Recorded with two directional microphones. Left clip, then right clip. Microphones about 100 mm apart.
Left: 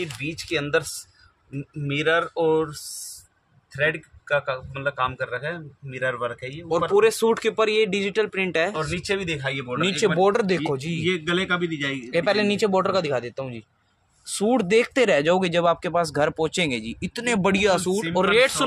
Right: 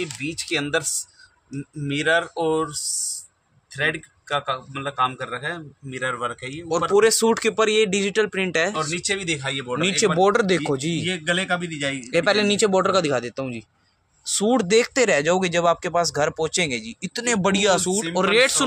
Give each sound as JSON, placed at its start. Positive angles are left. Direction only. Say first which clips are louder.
{"t": 0.0, "sound": "a man's voice", "louder": "right 2 dB", "side_deg": 0}
{"t": 8.9, "sound": "speech", "louder": "right 1 dB", "side_deg": 15}
{"t": 9.4, "sound": "a man's voice", "louder": "right 1 dB", "side_deg": 0}
{"t": 11.1, "sound": "a man's voice", "louder": "left 1 dB", "side_deg": -10}
{"t": 12.0, "sound": "speech", "louder": "right 2 dB", "side_deg": -30}
{"t": 14.2, "sound": "a man's voice", "louder": "right 2 dB", "side_deg": -5}